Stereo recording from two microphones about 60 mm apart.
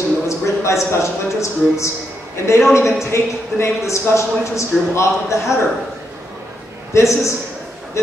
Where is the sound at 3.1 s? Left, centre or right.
Left.